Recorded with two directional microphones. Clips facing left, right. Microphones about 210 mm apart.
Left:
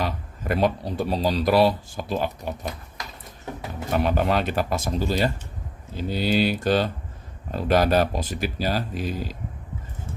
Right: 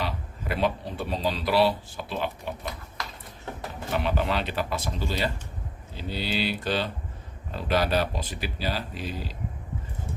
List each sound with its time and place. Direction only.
0.0 s speech: 45° left (ahead or behind)
3.9 s speech: 45° left (ahead or behind)